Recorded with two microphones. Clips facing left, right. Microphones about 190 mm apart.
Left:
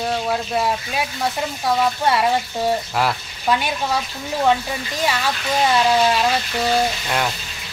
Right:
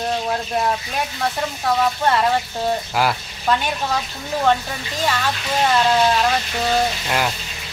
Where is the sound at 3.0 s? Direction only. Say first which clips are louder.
Right 2 dB; centre (ahead or behind).